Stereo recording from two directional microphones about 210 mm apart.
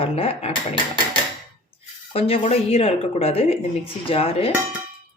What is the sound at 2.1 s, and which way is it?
Speech, 25° left (ahead or behind).